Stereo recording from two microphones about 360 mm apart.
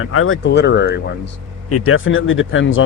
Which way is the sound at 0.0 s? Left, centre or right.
Left.